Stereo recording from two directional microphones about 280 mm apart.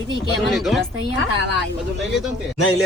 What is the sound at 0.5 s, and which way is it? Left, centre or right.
Speech, centre.